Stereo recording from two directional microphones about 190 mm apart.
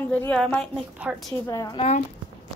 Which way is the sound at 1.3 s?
15° left (ahead or behind).